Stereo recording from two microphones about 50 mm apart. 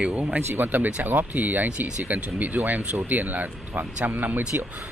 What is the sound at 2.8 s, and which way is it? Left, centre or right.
Speech, right.